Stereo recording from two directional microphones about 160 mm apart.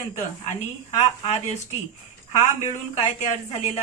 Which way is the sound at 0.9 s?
45° left (ahead or behind).